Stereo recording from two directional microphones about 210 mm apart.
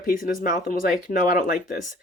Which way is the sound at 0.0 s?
40° left (ahead or behind).